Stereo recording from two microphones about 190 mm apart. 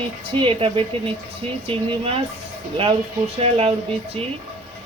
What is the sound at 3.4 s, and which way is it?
Speech, 30° right (ahead or behind).